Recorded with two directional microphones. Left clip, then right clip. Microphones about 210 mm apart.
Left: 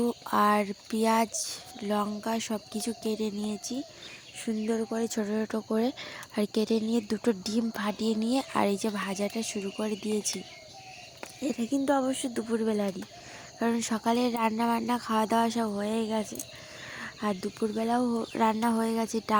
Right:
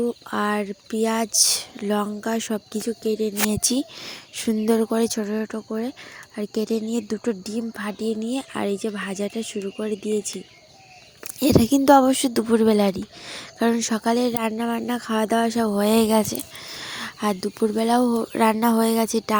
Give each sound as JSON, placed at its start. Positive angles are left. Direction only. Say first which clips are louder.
{"t": 0.0, "sound": "speech", "louder": "right 1 dB", "side_deg": -5}
{"t": 1.3, "sound": "speech", "louder": "right 15 dB", "side_deg": -35}
{"t": 1.8, "sound": "speech", "louder": "right 1 dB", "side_deg": -15}
{"t": 3.5, "sound": "speech", "louder": "right 12 dB", "side_deg": -35}
{"t": 5.1, "sound": "speech", "louder": "right 4 dB", "side_deg": -10}
{"t": 11.3, "sound": "speech", "louder": "right 12 dB", "side_deg": -30}